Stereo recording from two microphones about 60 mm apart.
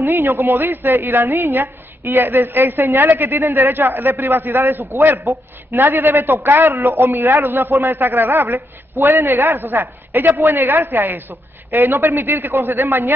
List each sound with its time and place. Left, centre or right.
0.0 s a man's voice: right